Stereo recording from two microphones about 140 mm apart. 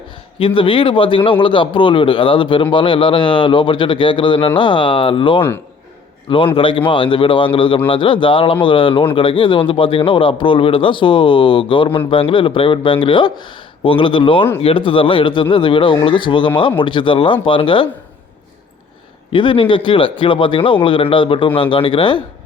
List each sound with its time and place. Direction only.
0.3 s speech: 40° left (ahead or behind)
19.3 s speech: 35° left (ahead or behind)